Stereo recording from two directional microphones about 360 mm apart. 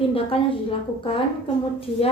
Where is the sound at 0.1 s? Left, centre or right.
Centre.